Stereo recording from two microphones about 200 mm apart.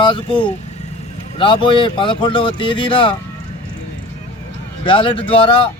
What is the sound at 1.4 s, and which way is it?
Speech, 25° left (ahead or behind).